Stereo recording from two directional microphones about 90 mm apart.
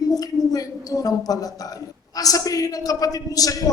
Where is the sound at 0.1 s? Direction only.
45° left (ahead or behind).